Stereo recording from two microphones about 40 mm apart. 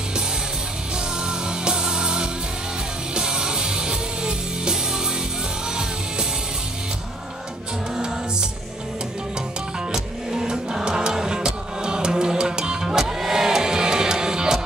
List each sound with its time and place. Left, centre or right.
1.2 s music: centre
9.9 s music: centre